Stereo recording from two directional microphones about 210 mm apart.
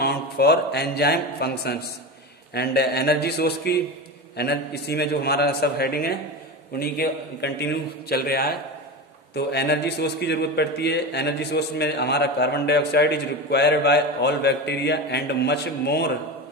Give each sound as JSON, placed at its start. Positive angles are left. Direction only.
{"t": 0.0, "sound": "a man's voice", "side_deg": 50}